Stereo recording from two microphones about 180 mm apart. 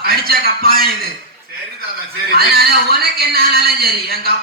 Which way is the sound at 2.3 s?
60° right (ahead or behind).